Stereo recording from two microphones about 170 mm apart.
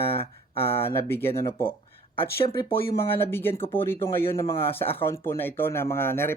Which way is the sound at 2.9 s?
15° left (ahead or behind).